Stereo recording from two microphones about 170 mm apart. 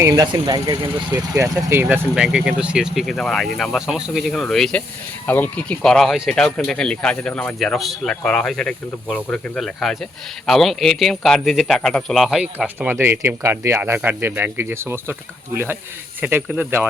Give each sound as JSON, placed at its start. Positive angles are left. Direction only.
{"t": 0.0, "sound": "speech", "side_deg": -20}
{"t": 1.4, "sound": "speech", "side_deg": -15}